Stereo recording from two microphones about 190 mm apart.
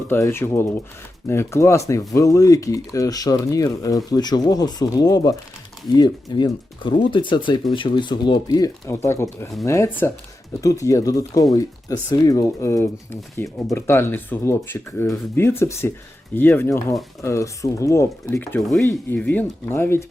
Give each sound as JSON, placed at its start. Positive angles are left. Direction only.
{"t": 0.1, "sound": "speech", "side_deg": 15}